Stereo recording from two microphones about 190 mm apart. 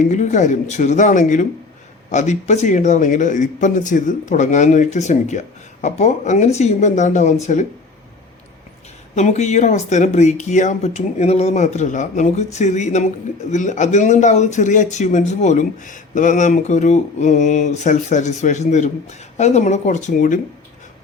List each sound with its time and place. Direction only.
0.0 s speech: 40° left (ahead or behind)
9.1 s speech: 35° left (ahead or behind)